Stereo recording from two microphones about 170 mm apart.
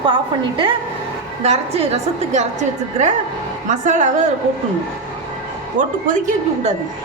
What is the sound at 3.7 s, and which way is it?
Speech, 45° right (ahead or behind).